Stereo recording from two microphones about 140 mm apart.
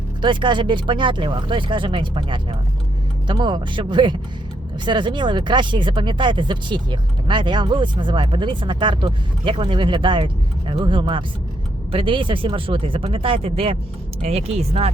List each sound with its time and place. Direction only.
0.2 s speech: 35° right (ahead or behind)